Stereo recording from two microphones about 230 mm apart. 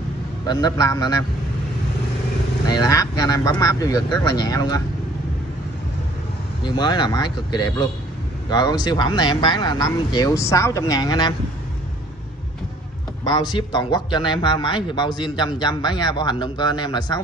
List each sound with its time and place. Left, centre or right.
0.5 s speech: centre
2.7 s speech: centre
6.6 s a man's voice: centre
13.3 s a man's voice: centre